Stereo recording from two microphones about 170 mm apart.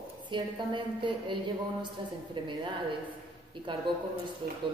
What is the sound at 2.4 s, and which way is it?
Speech, 30° right (ahead or behind).